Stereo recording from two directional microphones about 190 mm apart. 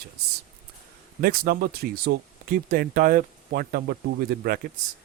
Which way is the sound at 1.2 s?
55° right (ahead or behind).